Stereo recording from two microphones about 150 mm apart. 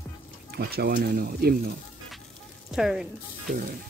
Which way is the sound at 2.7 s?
5° right (ahead or behind).